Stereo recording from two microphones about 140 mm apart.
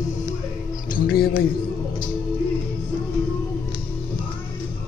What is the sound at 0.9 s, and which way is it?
Speech, 90° left.